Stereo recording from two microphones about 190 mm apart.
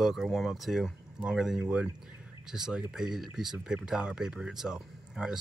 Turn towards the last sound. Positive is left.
turn(degrees=-5)  # may be behind; listen again after turning